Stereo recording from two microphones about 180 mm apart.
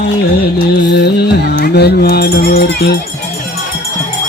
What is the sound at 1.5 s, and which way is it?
Speech, 65° left (ahead or behind).